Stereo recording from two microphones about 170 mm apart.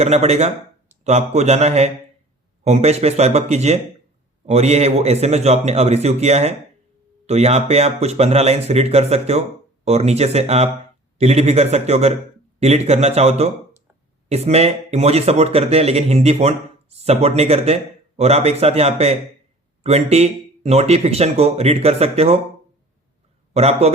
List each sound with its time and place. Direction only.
0.0 s a man's voice: 40° right (ahead or behind)
23.6 s speech: 40° right (ahead or behind)